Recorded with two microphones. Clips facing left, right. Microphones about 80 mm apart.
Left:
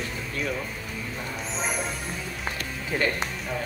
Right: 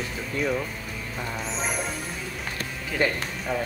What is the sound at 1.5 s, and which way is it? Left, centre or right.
Music, centre.